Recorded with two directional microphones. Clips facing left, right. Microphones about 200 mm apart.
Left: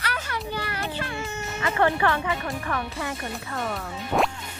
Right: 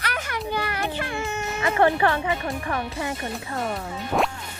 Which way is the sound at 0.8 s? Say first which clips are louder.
Right 3 dB; 20° right (ahead or behind).